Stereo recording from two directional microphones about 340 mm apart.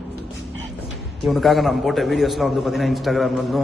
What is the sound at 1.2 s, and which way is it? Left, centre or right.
A man's voice, centre.